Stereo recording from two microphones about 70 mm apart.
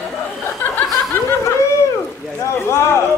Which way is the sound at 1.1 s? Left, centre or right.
Left.